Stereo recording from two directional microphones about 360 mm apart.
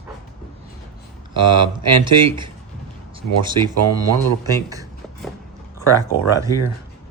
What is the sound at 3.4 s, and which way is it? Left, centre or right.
Speech, right.